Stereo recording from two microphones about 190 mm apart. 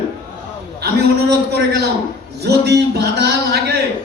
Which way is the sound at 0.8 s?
60° right (ahead or behind).